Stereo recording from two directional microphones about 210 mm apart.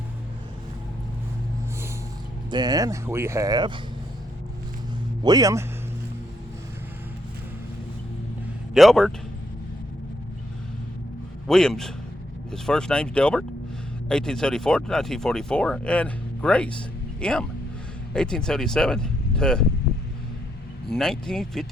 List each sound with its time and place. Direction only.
2.5 s speech: 20° right (ahead or behind)
5.2 s speech: 15° right (ahead or behind)
8.7 s speech: centre (ahead or behind)
11.4 s speech: centre (ahead or behind)
20.9 s speech: centre (ahead or behind)